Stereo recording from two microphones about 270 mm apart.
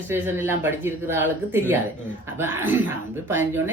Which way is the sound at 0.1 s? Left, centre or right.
Centre.